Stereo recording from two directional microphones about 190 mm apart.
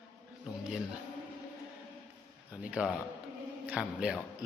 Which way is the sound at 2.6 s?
5° right (ahead or behind).